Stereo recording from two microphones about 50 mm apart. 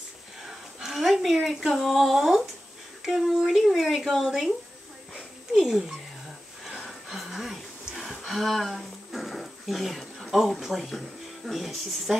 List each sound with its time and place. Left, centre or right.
0.5 s a sound: centre
1.3 s speech: centre
1.7 s speech: centre
5.6 s speech: centre
6.6 s a sound: centre
10.3 s speech: centre